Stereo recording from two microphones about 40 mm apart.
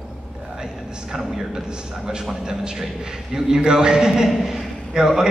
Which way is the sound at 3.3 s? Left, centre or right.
Centre.